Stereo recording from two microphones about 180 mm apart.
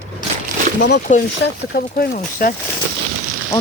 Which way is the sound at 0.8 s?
70° left (ahead or behind).